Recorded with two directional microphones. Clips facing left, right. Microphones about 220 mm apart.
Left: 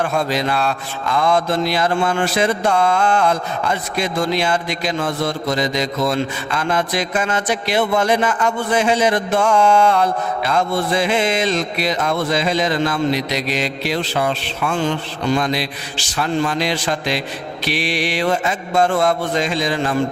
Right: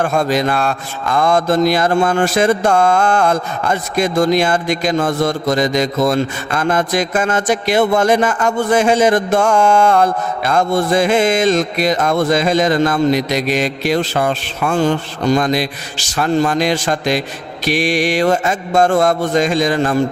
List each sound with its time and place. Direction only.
0.0 s speech: 45° right (ahead or behind)